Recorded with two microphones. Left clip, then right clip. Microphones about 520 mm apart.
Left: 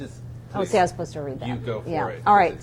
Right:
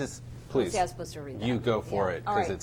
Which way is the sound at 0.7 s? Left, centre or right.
Left.